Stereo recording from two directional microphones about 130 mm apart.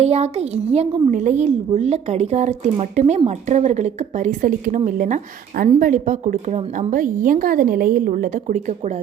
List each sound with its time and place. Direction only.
0.0 s a woman's voice: 55° right (ahead or behind); by 4.8 s 90° right
4.9 s a woman's voice: 75° right (ahead or behind)